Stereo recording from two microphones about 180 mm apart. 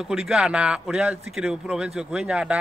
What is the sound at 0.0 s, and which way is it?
A man's voice, centre (ahead or behind).